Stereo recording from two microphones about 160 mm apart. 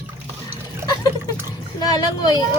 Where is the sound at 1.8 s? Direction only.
25° left (ahead or behind).